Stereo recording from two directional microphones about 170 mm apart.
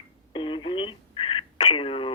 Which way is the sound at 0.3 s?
30° left (ahead or behind).